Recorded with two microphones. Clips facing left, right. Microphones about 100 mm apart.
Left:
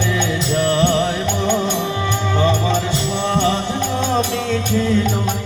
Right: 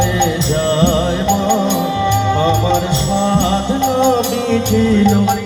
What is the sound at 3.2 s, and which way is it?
Music, 25° right (ahead or behind).